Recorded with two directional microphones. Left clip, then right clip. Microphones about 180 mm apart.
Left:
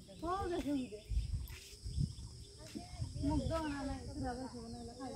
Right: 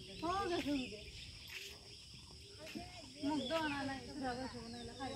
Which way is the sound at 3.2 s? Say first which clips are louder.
Even; 35° left (ahead or behind).